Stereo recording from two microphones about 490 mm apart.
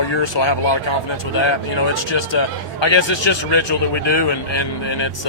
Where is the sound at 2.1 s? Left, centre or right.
Left.